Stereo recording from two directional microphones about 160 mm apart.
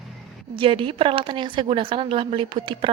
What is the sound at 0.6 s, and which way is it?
A woman's voice, 35° right (ahead or behind).